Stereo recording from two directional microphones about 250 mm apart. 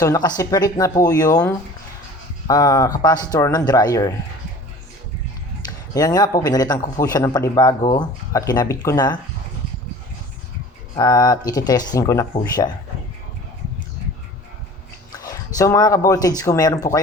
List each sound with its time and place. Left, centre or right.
0.0 s speech: centre
2.5 s speech: centre
5.6 s speech: centre
10.9 s speech: centre
15.1 s speech: centre